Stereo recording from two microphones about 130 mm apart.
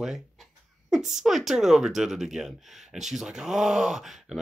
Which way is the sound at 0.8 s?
5° right (ahead or behind).